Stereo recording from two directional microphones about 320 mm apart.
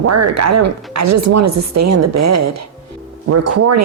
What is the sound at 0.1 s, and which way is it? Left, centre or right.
A woman's voice, right.